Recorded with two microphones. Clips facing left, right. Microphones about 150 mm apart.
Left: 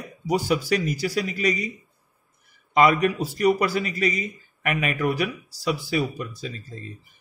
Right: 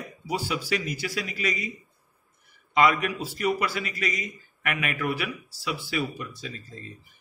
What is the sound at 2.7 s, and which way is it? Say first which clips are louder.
Speech: left 4 dB; 40° left (ahead or behind).